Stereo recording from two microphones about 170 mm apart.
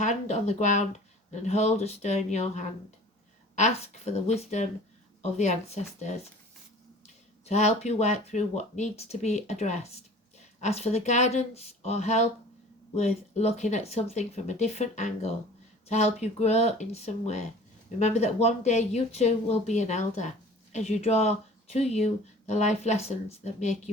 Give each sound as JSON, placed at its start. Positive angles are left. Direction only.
{"t": 0.0, "sound": "speech", "side_deg": 40}
{"t": 7.4, "sound": "speech", "side_deg": 40}